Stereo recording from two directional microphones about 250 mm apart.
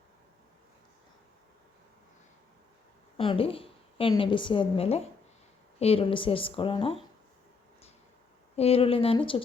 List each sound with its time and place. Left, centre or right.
3.2 s a woman's voice: left
8.5 s speech: left